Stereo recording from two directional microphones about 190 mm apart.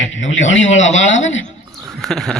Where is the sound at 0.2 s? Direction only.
80° left.